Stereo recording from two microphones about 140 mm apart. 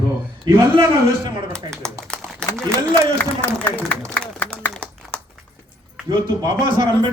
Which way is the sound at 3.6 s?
10° left (ahead or behind).